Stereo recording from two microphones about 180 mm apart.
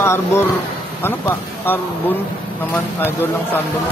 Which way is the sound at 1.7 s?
10° left (ahead or behind).